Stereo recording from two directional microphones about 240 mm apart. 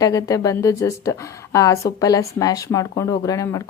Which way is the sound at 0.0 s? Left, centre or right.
Centre.